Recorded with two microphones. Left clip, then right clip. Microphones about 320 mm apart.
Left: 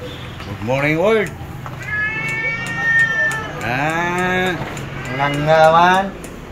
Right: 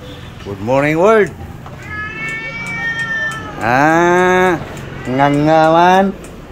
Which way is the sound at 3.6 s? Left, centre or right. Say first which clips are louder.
Right 9 dB; centre.